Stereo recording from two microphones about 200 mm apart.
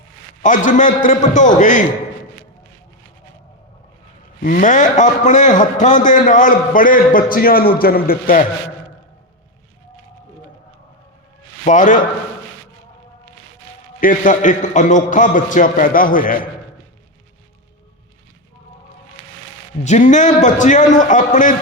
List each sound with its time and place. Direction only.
0.4 s a man's voice: 40° left (ahead or behind)
4.4 s a man's voice: 45° left (ahead or behind)
11.6 s a man's voice: 40° left (ahead or behind)
14.0 s a man's voice: 40° left (ahead or behind)
19.8 s a man's voice: 35° left (ahead or behind)